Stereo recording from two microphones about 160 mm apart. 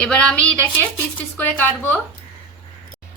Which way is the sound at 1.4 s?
10° left (ahead or behind).